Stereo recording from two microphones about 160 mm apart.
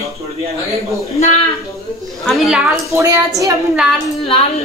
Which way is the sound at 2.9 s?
20° right (ahead or behind).